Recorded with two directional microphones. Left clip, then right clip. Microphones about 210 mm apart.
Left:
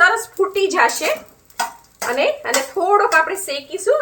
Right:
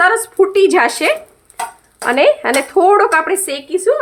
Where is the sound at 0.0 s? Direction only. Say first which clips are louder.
Right 3 dB; 55° right (ahead or behind).